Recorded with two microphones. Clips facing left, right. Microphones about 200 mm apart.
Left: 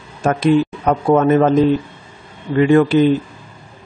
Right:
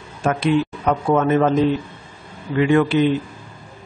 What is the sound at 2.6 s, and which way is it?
Speech, 40° left (ahead or behind).